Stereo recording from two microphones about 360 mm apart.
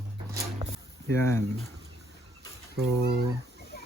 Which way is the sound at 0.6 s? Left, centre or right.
Centre.